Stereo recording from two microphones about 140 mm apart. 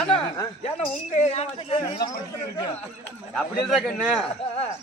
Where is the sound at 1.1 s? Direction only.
50° left (ahead or behind).